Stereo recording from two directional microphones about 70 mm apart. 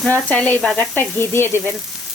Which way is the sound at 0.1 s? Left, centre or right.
Left.